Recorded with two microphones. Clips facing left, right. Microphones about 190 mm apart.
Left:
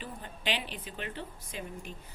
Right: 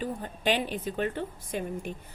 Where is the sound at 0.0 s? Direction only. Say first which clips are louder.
Right 8 dB; 45° right (ahead or behind).